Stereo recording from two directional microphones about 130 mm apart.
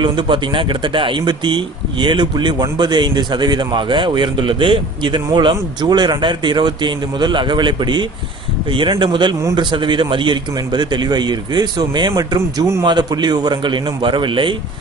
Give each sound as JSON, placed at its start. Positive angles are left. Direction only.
{"t": 0.0, "sound": "speech", "side_deg": -40}